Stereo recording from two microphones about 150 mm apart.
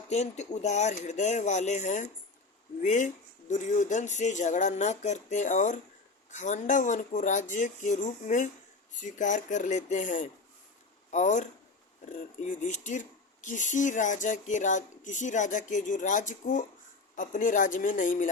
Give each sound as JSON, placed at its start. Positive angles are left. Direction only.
{"t": 0.1, "sound": "speech", "side_deg": 50}